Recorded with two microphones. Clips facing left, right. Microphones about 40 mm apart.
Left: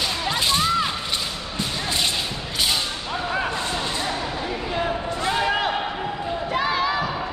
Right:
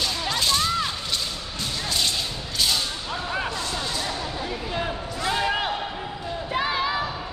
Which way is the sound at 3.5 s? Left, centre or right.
Left.